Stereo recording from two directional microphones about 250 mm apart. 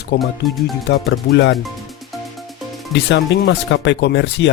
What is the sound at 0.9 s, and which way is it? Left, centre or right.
Speech, left.